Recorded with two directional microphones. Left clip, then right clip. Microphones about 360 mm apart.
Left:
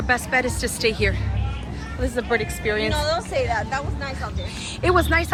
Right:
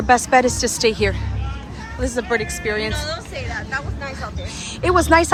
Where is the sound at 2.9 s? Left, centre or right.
Centre.